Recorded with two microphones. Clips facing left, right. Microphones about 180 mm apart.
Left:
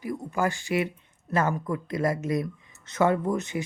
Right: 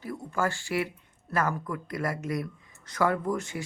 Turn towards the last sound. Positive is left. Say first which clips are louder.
# left 3 dB
turn(degrees=20)  # may be behind; listen again after turning